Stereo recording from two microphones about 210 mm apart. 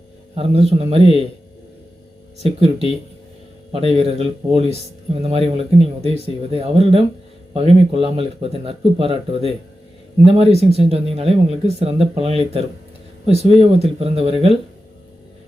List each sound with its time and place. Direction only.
0.3 s speech: 25° right (ahead or behind)
2.4 s speech: 30° right (ahead or behind)